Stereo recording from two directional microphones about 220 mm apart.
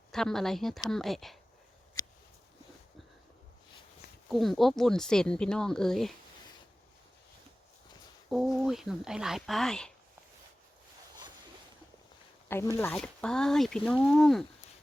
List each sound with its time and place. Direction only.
0.1 s speech: centre (ahead or behind)
4.3 s speech: centre (ahead or behind)
8.3 s speech: centre (ahead or behind)
12.7 s speech: 10° left (ahead or behind)